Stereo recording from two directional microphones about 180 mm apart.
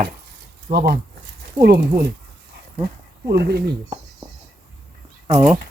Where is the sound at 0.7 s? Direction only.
60° right (ahead or behind).